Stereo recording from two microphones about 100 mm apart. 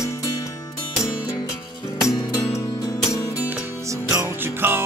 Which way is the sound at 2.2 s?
35° left (ahead or behind).